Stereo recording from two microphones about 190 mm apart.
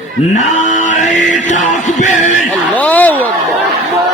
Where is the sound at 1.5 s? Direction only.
40° left (ahead or behind).